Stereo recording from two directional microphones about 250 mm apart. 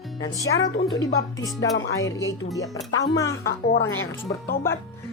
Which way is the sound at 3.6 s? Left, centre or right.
Left.